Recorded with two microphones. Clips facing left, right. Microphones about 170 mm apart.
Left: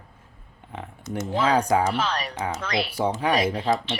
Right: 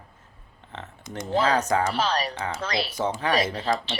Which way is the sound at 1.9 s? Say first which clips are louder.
Right 1 dB; 35° right (ahead or behind).